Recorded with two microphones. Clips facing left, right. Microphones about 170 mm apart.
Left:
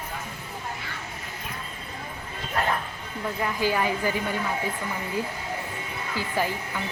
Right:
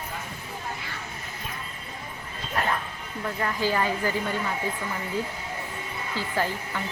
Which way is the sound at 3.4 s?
15° left (ahead or behind).